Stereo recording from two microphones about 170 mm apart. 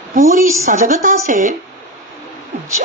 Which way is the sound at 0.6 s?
45° right (ahead or behind).